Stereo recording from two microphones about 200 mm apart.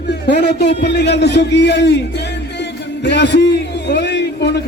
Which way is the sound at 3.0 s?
60° left (ahead or behind).